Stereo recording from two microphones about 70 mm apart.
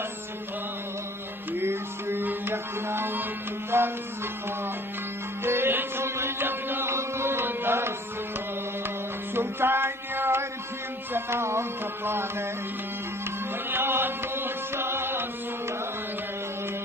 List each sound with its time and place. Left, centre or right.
1.5 s music: right
5.4 s music: right
9.3 s music: right
13.7 s music: right